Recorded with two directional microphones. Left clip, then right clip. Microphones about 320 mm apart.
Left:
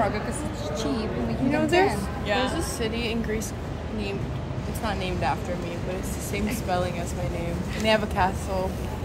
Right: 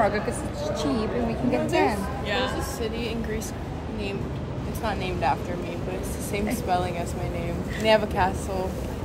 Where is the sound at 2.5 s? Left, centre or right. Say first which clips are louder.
Left 1 dB; left.